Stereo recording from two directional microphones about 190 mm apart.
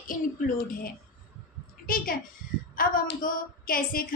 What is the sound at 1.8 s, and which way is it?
A woman's voice, 50° left (ahead or behind).